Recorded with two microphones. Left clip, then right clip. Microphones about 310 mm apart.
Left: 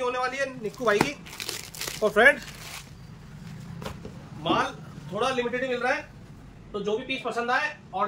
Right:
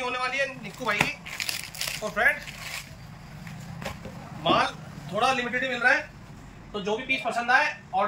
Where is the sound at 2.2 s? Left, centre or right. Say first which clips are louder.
Left 5 dB; left.